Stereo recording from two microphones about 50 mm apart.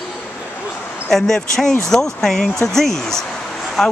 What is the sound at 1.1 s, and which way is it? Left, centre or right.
Speech, centre.